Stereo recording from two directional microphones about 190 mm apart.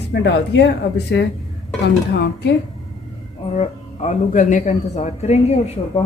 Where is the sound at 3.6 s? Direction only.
40° left (ahead or behind).